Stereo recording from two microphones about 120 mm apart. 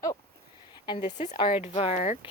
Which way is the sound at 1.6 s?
70° left (ahead or behind).